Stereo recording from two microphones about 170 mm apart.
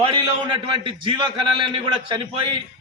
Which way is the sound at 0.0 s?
30° right (ahead or behind).